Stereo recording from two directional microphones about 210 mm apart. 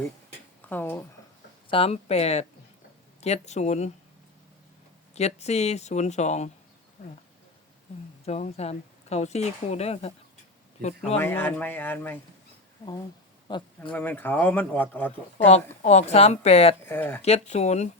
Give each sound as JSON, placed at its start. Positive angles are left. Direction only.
{"t": 0.7, "sound": "speech", "side_deg": 10}
{"t": 1.7, "sound": "speech", "side_deg": 30}
{"t": 5.1, "sound": "speech", "side_deg": 30}
{"t": 8.2, "sound": "speech", "side_deg": 30}
{"t": 11.2, "sound": "speech", "side_deg": 10}
{"t": 13.5, "sound": "speech", "side_deg": 20}
{"t": 13.9, "sound": "speech", "side_deg": 10}
{"t": 15.4, "sound": "speech", "side_deg": 30}
{"t": 16.8, "sound": "speech", "side_deg": 10}
{"t": 17.2, "sound": "speech", "side_deg": 30}